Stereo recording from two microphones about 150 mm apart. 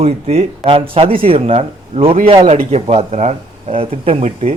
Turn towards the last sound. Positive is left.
turn(degrees=-40)  # may be behind; listen again after turning